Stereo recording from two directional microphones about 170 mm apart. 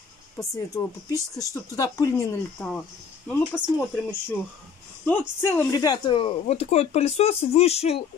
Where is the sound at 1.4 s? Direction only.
20° left (ahead or behind).